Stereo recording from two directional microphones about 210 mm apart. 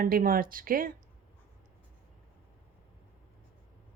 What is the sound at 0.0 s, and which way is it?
Speech, 40° right (ahead or behind).